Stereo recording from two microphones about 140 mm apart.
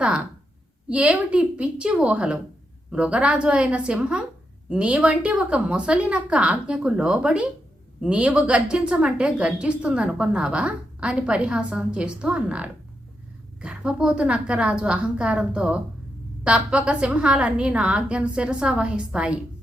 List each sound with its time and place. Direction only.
0.9 s a woman's voice: 10° right (ahead or behind)